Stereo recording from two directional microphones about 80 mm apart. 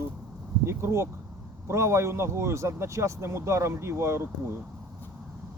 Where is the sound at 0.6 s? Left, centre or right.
Right.